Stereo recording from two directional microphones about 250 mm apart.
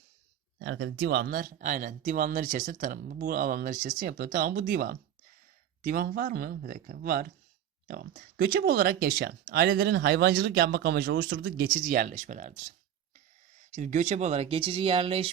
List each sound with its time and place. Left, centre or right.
0.6 s speech: right
13.7 s speech: right